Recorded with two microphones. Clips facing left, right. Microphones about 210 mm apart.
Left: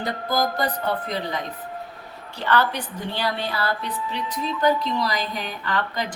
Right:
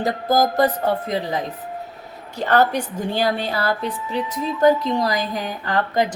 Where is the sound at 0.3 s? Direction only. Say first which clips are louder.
Right 7 dB; 45° right (ahead or behind).